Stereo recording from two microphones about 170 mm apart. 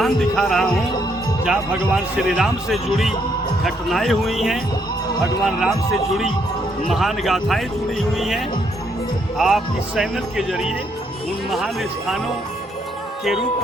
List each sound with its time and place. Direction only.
0.0 s speech: centre (ahead or behind)
9.4 s speech: centre (ahead or behind)